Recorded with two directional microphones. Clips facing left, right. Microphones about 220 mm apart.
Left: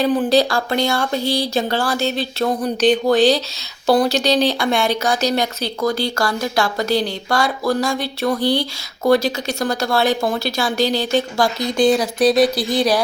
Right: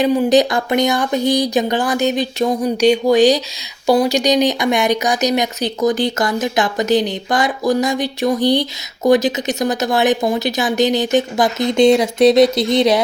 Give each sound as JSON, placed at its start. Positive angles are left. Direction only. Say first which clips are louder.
{"t": 0.0, "sound": "speech", "louder": "right 3 dB", "side_deg": -15}